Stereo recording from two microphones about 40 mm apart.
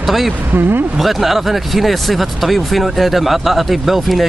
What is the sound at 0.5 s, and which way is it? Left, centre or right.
Speech, right.